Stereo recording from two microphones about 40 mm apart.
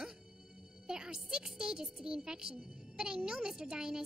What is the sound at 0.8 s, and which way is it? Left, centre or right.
A woman's voice, centre.